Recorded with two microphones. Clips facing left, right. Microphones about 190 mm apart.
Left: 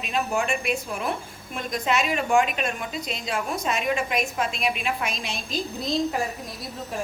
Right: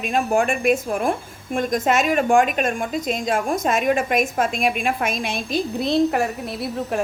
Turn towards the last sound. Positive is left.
turn(degrees=-65)  # may be behind; listen again after turning